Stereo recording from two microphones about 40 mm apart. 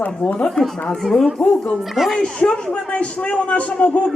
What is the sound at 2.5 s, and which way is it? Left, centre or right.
Speech, left.